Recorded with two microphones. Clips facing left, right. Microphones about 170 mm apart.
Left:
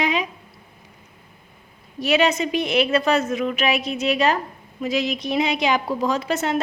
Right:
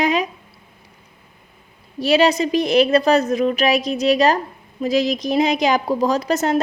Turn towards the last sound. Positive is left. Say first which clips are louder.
# right 4 dB
turn(degrees=-40)  # may be behind; listen again after turning